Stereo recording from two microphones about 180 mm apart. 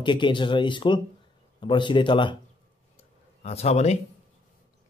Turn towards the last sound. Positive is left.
turn(degrees=35)  # may be behind; listen again after turning